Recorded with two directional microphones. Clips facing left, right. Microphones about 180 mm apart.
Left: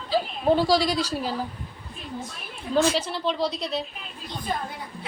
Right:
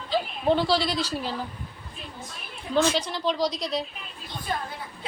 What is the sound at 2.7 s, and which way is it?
Speech, 5° left (ahead or behind).